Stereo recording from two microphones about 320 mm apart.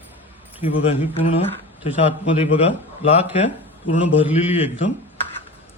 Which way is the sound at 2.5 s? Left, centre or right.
Centre.